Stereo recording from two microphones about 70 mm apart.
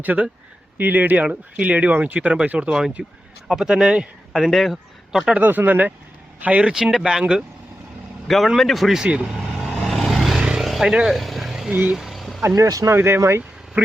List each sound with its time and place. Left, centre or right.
0.0 s a man's voice: right; by 5.3 s centre
5.4 s speech: right; by 7.4 s centre
8.3 s vehicle: centre
11.7 s speech: right
11.9 s vehicle: centre
12.5 s speech: right
12.9 s speech: right
13.8 s speech: centre